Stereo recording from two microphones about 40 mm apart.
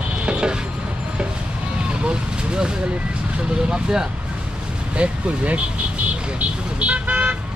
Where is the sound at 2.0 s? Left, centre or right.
Right.